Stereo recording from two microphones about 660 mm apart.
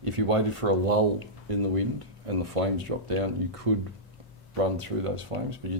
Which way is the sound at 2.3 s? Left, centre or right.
Right.